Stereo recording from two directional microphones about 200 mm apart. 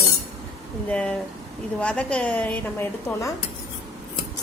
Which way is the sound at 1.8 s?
5° left (ahead or behind).